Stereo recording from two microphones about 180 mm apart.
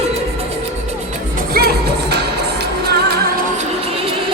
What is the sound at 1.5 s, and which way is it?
Music, 65° right (ahead or behind).